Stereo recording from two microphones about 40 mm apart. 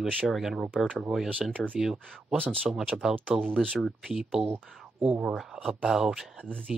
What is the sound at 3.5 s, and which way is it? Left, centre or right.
Speech, centre.